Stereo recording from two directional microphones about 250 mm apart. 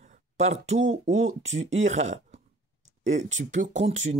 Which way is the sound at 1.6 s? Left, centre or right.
Right.